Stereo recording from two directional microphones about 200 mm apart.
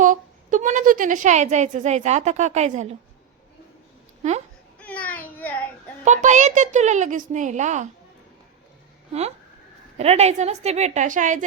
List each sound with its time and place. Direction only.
0.0 s a woman's voice: 40° right (ahead or behind)
4.8 s a sound: 5° left (ahead or behind)
6.1 s a woman's voice: 35° right (ahead or behind)
10.0 s a woman's voice: 30° right (ahead or behind)